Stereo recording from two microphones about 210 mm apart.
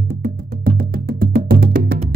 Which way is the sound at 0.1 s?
50° right (ahead or behind).